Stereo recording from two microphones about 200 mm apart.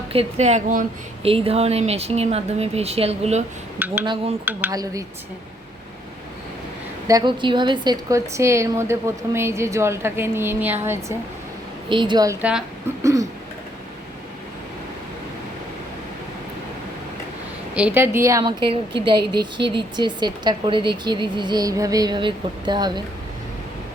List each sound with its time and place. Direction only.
0.1 s speech: 30° right (ahead or behind)
3.8 s a woman's voice: 10° right (ahead or behind)
4.0 s a woman's voice: 25° right (ahead or behind)
7.1 s a woman's voice: 20° right (ahead or behind)
11.9 s a woman's voice: 25° right (ahead or behind); by 13.1 s 5° right (ahead or behind)
17.7 s a woman's voice: 10° right (ahead or behind)